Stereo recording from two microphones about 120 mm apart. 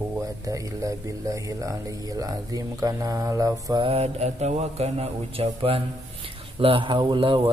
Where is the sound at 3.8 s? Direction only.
55° right (ahead or behind).